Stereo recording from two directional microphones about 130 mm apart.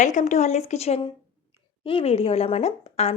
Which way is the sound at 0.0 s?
70° left (ahead or behind).